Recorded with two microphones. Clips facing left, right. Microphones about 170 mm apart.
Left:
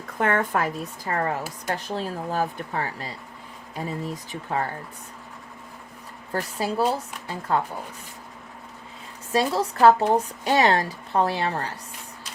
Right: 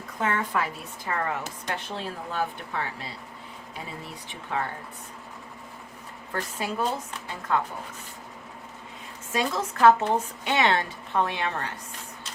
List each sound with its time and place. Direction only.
0.2 s speech: 55° left (ahead or behind)
6.3 s speech: 35° left (ahead or behind)
9.3 s speech: 35° left (ahead or behind)